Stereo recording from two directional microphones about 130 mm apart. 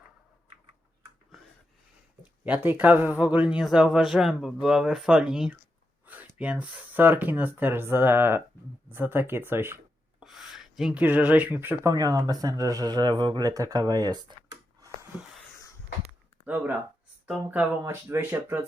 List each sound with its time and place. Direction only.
2.6 s speech: 15° right (ahead or behind)
10.2 s speech: centre (ahead or behind)
11.9 s speech: 30° right (ahead or behind)
17.2 s speech: 10° right (ahead or behind)
17.8 s speech: 20° right (ahead or behind)